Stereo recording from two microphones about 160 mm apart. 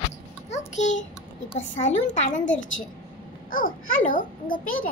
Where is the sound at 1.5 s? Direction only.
50° left (ahead or behind).